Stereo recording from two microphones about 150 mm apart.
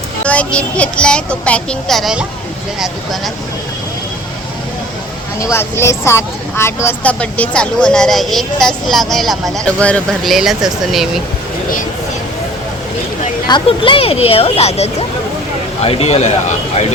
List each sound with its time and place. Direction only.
0.3 s speech: 10° left (ahead or behind)
5.4 s speech: 15° left (ahead or behind); by 11.2 s centre (ahead or behind)
13.5 s speech: 35° left (ahead or behind)